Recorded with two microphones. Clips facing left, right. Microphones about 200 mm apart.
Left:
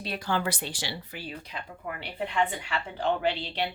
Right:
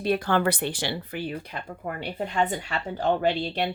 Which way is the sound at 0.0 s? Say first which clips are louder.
Right 7 dB; 55° right (ahead or behind).